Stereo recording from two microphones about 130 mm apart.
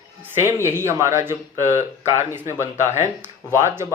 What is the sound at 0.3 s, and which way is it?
Speech, 20° right (ahead or behind).